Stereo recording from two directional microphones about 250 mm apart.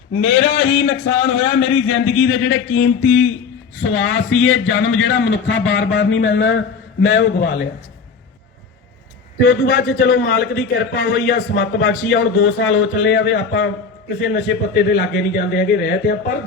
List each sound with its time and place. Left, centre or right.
0.1 s a man's voice: left
9.4 s a man's voice: left